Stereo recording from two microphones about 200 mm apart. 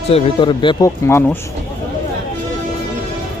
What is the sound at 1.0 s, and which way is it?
Speech, 10° left (ahead or behind).